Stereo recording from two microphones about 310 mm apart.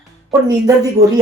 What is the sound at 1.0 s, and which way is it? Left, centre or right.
Speech, right.